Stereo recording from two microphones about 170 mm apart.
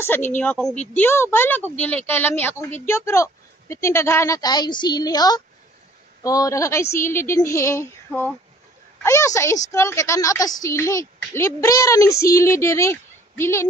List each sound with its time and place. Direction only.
0.4 s a woman's voice: 5° left (ahead or behind)